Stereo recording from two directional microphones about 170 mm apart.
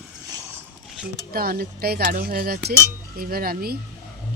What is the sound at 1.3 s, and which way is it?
Speech, 65° right (ahead or behind).